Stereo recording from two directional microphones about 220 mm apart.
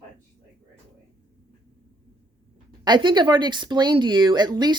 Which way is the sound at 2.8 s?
20° right (ahead or behind).